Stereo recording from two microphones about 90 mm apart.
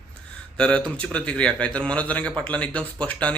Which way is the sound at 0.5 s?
10° left (ahead or behind).